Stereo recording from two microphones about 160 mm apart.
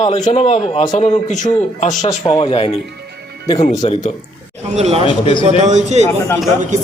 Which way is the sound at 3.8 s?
45° left (ahead or behind).